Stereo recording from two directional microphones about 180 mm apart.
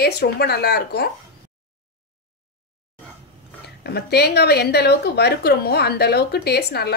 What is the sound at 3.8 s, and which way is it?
A woman's voice, 65° left (ahead or behind).